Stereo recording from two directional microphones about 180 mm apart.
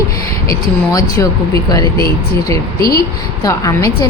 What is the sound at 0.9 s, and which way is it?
Speech, 20° left (ahead or behind).